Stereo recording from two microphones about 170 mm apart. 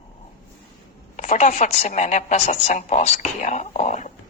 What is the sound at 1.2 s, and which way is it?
A woman's voice, 45° left (ahead or behind).